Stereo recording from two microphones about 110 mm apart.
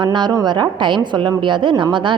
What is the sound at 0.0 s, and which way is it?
A woman's voice, 45° right (ahead or behind).